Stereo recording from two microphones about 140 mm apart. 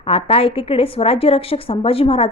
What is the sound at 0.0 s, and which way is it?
A woman's voice, 45° left (ahead or behind).